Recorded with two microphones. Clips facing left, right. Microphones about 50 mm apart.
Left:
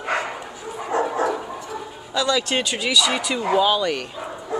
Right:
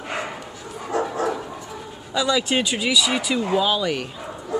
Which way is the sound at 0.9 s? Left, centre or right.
Left.